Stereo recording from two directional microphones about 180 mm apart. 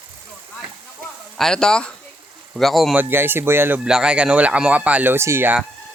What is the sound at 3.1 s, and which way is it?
Speech, 10° right (ahead or behind).